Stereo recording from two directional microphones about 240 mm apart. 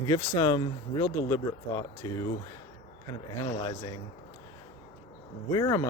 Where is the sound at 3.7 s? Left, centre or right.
Centre.